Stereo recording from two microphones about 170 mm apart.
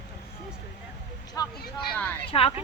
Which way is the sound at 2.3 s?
35° left (ahead or behind).